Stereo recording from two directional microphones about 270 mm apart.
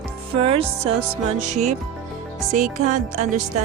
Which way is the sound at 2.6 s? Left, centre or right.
Right.